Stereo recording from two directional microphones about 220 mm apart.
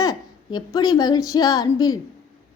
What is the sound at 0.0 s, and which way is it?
Speech, 15° left (ahead or behind).